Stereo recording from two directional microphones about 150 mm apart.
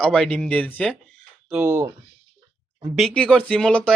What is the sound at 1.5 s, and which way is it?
Speech, 15° right (ahead or behind).